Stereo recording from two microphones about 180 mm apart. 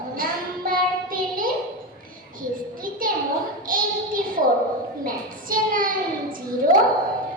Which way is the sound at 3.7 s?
50° right (ahead or behind).